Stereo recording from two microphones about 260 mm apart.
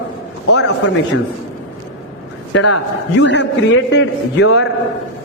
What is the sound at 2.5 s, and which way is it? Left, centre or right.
A man's voice, left.